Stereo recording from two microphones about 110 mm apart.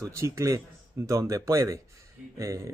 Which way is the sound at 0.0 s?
30° right (ahead or behind).